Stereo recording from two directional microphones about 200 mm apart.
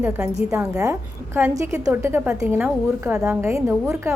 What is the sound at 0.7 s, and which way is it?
A woman's voice, 15° right (ahead or behind).